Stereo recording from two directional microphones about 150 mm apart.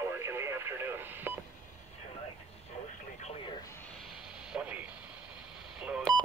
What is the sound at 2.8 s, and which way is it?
Vehicle, 50° left (ahead or behind).